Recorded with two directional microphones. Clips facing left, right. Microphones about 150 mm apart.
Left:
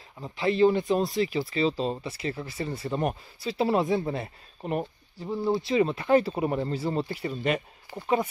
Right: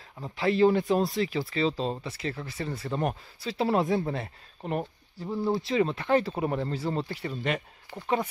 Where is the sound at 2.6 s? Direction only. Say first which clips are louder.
Even; 30° left (ahead or behind).